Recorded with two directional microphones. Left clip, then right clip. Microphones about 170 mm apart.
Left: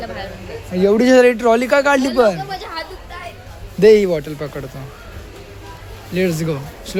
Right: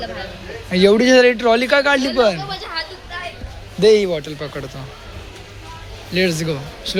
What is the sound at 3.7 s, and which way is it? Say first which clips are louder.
Speech: left 2 dB; 25° left (ahead or behind).